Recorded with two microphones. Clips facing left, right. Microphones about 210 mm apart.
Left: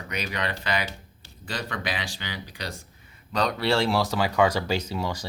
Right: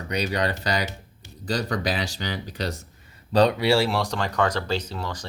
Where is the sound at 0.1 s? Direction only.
35° right (ahead or behind).